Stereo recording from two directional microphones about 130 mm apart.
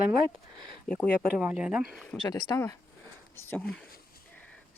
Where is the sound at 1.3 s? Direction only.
10° right (ahead or behind).